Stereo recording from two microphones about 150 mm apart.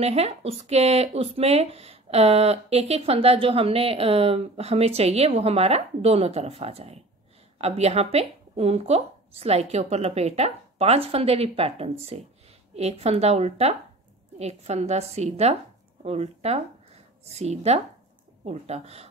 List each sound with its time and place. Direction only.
0.0 s speech: 45° right (ahead or behind)